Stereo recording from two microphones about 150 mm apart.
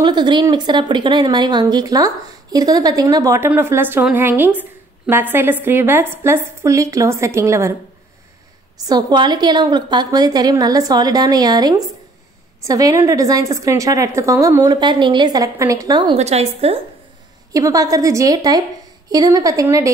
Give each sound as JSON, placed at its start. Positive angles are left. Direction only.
{"t": 0.0, "sound": "speech", "side_deg": -30}
{"t": 8.8, "sound": "speech", "side_deg": -30}
{"t": 16.2, "sound": "a woman's voice", "side_deg": -45}
{"t": 17.5, "sound": "speech", "side_deg": -20}